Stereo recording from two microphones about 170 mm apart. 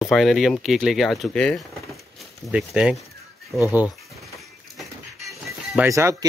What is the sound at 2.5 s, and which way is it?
Speech, 5° right (ahead or behind).